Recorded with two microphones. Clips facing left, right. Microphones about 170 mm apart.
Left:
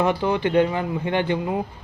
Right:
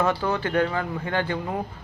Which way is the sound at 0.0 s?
15° left (ahead or behind).